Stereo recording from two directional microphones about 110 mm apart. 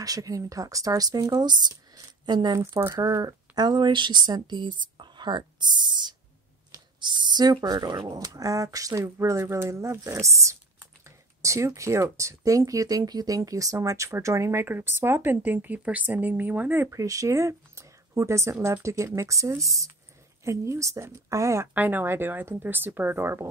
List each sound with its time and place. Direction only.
0.0 s speech: 35° right (ahead or behind)
2.8 s speech: 25° right (ahead or behind); by 6.1 s 40° right (ahead or behind)
6.7 s a sound: 45° right (ahead or behind)
7.6 s speech: 35° right (ahead or behind)
21.7 s speech: 15° right (ahead or behind)